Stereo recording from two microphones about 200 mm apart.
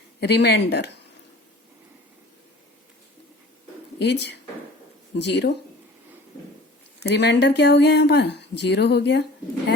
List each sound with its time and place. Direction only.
0.2 s speech: 55° left (ahead or behind)
4.0 s speech: 60° left (ahead or behind)
7.0 s speech: 60° left (ahead or behind)